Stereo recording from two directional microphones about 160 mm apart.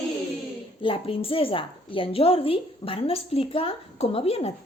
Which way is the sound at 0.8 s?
35° left (ahead or behind).